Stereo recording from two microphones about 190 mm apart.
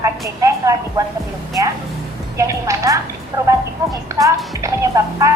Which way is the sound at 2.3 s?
15° right (ahead or behind).